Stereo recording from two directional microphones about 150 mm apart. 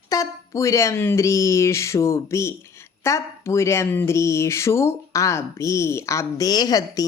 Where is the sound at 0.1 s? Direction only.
20° left (ahead or behind).